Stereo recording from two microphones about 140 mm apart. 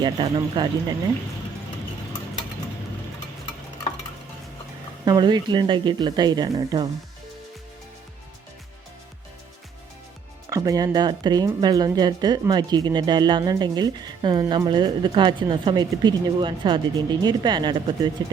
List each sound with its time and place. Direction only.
0.0 s speech: 35° right (ahead or behind)
5.0 s speech: 30° right (ahead or behind)
10.5 s speech: 25° right (ahead or behind)